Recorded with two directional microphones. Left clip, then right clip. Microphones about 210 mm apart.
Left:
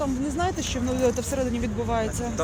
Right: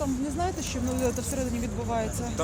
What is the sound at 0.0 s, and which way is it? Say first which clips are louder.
Speech: left 3 dB; 35° left (ahead or behind).